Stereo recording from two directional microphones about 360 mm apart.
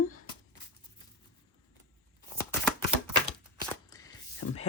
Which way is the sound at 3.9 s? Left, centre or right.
Centre.